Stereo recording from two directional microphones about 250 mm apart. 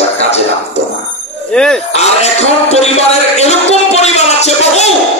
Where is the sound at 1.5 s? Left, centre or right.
Centre.